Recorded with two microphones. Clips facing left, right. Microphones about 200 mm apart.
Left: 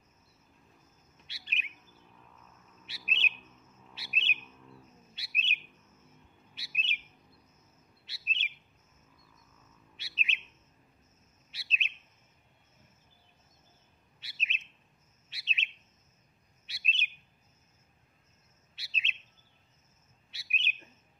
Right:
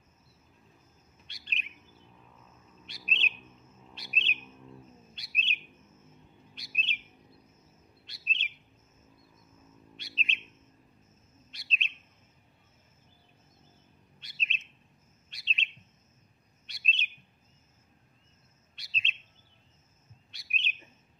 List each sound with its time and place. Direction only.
1.1 s bird: 5° left (ahead or behind)
2.9 s bird: 5° left (ahead or behind)
4.4 s bird: 15° right (ahead or behind)
5.1 s chirp: 5° left (ahead or behind)
6.5 s bird: 5° left (ahead or behind)
8.1 s bird: 5° left (ahead or behind)
9.9 s bird: 5° left (ahead or behind)
11.5 s chirp: 5° left (ahead or behind)
14.2 s chirp: 5° left (ahead or behind)
16.6 s bird: 5° left (ahead or behind)
20.2 s chirp: 5° left (ahead or behind)